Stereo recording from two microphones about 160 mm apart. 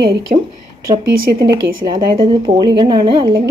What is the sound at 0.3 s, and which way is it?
Speech, 50° right (ahead or behind).